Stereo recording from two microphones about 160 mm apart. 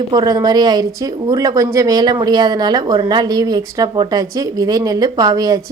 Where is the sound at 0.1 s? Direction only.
25° right (ahead or behind).